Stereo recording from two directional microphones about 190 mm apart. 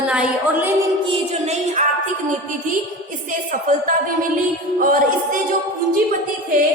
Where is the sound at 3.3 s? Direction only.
45° right (ahead or behind).